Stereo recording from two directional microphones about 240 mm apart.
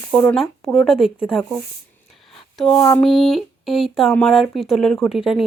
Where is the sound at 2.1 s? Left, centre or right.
Centre.